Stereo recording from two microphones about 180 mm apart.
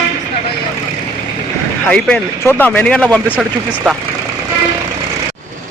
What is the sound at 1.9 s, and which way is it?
Speech, 5° left (ahead or behind).